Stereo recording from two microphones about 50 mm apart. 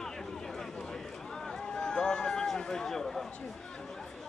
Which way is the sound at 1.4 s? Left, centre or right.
Centre.